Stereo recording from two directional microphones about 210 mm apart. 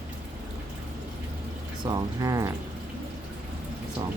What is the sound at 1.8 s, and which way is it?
Speech, 20° right (ahead or behind).